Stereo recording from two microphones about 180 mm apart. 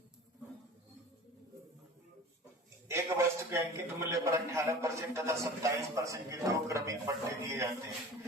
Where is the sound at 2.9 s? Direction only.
15° right (ahead or behind).